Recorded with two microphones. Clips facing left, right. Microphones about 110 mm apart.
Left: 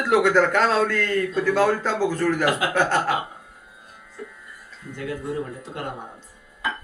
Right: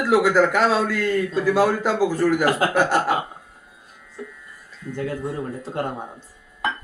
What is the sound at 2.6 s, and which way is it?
Speech, 40° right (ahead or behind).